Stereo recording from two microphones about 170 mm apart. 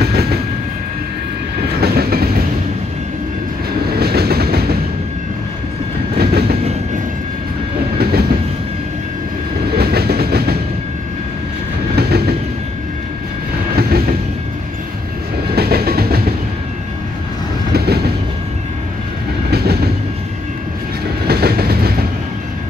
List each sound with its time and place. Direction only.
0.0 s train: 70° right (ahead or behind)
1.8 s train: 65° right (ahead or behind)
4.0 s train: 70° right (ahead or behind)
6.1 s train: 70° right (ahead or behind)
8.0 s train: 65° right (ahead or behind)
9.8 s train: 70° right (ahead or behind)
11.9 s train: 70° right (ahead or behind)
13.7 s train: 65° right (ahead or behind)
15.5 s train: 65° right (ahead or behind)
17.7 s train: 70° right (ahead or behind)
19.5 s train: 70° right (ahead or behind)
21.3 s train: 65° right (ahead or behind)